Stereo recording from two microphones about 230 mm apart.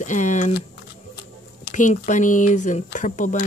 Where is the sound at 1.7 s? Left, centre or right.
Left.